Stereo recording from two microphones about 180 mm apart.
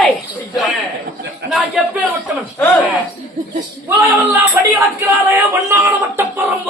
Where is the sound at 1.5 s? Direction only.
5° right (ahead or behind).